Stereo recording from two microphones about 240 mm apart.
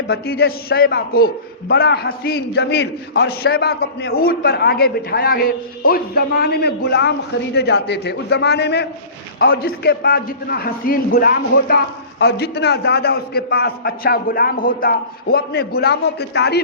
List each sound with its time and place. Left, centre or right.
0.1 s a man's voice: left